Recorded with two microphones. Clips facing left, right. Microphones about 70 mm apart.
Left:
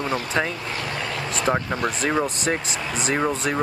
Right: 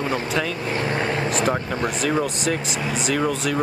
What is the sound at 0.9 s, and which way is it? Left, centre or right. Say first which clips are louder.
Vehicle: right 6 dB; right.